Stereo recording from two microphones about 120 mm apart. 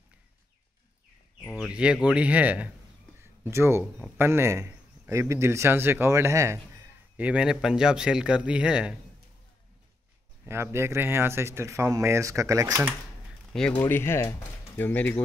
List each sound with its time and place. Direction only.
1.7 s a man's voice: 10° right (ahead or behind)
3.2 s a sound: 20° right (ahead or behind)
4.0 s a man's voice: 20° right (ahead or behind)
10.4 s speech: 20° right (ahead or behind)
13.5 s speech: 5° left (ahead or behind)
13.7 s speech: 20° left (ahead or behind)